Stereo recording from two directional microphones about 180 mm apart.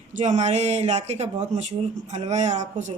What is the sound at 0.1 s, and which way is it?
Speech, 45° right (ahead or behind).